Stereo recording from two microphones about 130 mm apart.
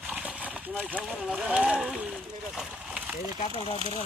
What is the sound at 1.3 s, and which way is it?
Speech, 10° right (ahead or behind).